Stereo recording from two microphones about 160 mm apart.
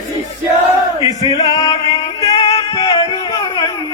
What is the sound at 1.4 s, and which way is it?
Music, 20° left (ahead or behind).